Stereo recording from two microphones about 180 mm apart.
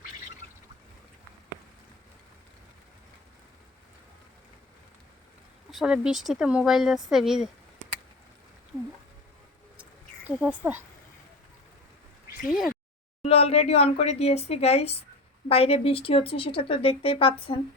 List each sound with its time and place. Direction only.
5.7 s speech: 5° right (ahead or behind)
10.2 s speech: 5° right (ahead or behind)
12.5 s speech: centre (ahead or behind)
13.2 s speech: 35° left (ahead or behind)